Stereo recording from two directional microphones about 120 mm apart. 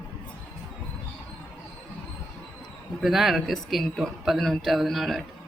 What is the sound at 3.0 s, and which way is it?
Speech, centre (ahead or behind).